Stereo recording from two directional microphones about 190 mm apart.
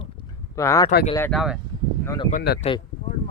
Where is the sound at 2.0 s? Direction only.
20° left (ahead or behind).